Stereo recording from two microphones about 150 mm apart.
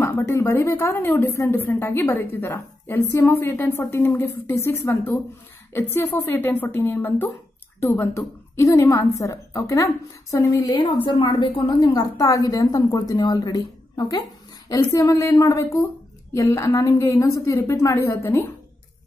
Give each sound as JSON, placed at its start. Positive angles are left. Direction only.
{"t": 0.0, "sound": "a woman's voice", "side_deg": 20}